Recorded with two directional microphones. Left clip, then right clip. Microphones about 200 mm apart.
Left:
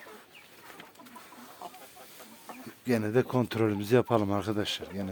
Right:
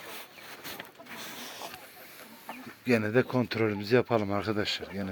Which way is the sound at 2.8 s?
15° left (ahead or behind).